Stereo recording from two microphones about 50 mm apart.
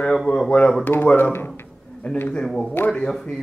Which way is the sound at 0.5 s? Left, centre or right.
Centre.